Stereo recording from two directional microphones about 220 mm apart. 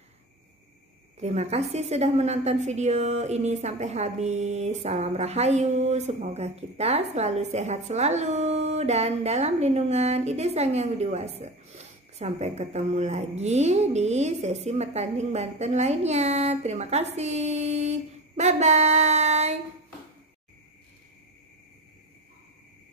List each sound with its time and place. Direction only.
1.2 s a woman's voice: 30° right (ahead or behind)